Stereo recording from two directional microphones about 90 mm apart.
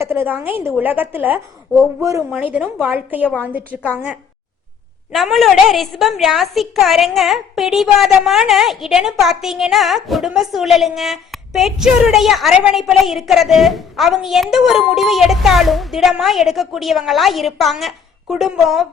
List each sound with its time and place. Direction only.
0.0 s a woman's voice: 25° right (ahead or behind)
2.0 s a man's voice: 35° right (ahead or behind)
2.3 s a woman's voice: 20° right (ahead or behind)
3.7 s a woman's voice: 15° left (ahead or behind)
5.1 s a woman's voice: centre (ahead or behind)